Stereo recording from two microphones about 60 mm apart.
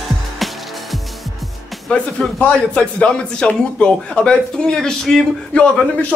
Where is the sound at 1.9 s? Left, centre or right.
Centre.